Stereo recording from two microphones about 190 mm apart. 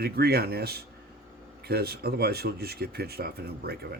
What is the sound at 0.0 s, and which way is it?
Speech, 55° right (ahead or behind).